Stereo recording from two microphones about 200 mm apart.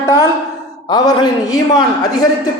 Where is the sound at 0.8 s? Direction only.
20° left (ahead or behind).